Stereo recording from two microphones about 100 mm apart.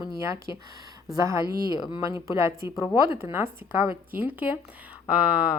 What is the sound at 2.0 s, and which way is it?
A woman's voice, 30° right (ahead or behind).